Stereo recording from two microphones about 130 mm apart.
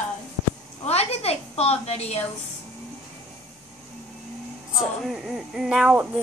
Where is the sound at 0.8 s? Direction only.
50° left (ahead or behind).